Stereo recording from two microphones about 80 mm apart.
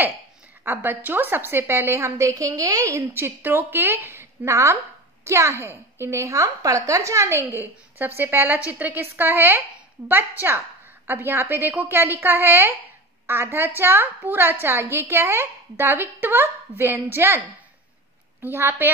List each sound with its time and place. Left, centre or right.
0.7 s a woman's voice: right
3.1 s a woman's voice: right
11.1 s a woman's voice: right
18.4 s a woman's voice: right